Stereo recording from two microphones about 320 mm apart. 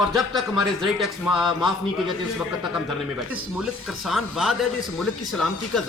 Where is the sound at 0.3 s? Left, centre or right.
Centre.